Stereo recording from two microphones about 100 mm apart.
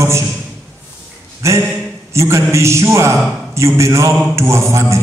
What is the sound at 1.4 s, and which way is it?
A man's voice, 30° right (ahead or behind).